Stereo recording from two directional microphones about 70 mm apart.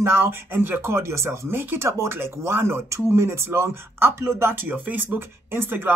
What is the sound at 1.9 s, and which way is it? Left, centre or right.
Speech, right.